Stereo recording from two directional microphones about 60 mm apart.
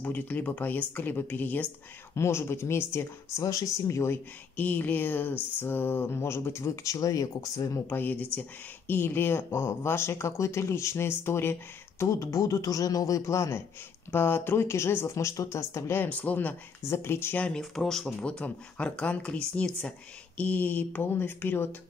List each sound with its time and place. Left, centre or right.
0.0 s speech: left
2.1 s speech: left
3.3 s speech: left
4.6 s speech: left
7.8 s speech: left
12.0 s speech: left
14.1 s speech: left
16.0 s speech: left
16.9 s speech: left
17.6 s speech: centre
18.2 s speech: centre; by 21.6 s left